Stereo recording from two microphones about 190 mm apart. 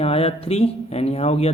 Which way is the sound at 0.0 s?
30° left (ahead or behind).